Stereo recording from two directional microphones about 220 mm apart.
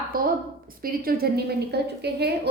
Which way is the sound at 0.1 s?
40° right (ahead or behind).